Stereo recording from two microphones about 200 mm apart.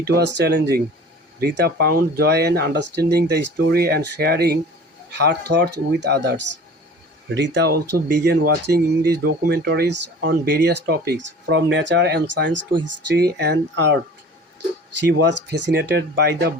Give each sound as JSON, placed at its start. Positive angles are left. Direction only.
{"t": 0.0, "sound": "speech", "side_deg": -55}
{"t": 15.0, "sound": "speech", "side_deg": -60}